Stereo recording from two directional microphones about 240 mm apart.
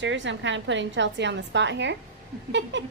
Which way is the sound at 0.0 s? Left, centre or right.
Right.